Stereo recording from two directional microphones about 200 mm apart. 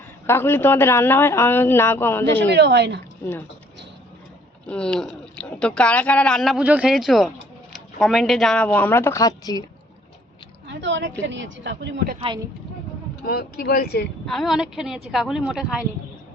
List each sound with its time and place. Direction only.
0.3 s a man's voice: 10° left (ahead or behind)
2.5 s speech: 60° right (ahead or behind)
4.6 s a man's voice: 5° left (ahead or behind)
10.7 s a sound: 65° right (ahead or behind)
11.3 s speech: 65° right (ahead or behind)
13.2 s speech: 50° left (ahead or behind)
14.3 s speech: centre (ahead or behind)